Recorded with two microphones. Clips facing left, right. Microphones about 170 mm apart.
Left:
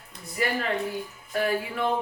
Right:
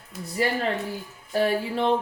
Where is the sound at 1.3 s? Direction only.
30° right (ahead or behind).